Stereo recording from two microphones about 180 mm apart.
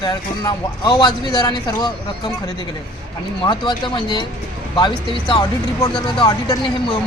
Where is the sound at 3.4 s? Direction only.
25° left (ahead or behind).